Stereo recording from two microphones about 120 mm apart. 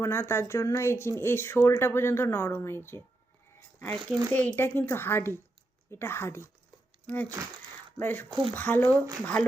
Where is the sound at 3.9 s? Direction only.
35° right (ahead or behind).